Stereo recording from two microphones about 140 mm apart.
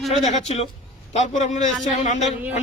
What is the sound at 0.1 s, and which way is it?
A man's voice, 50° left (ahead or behind).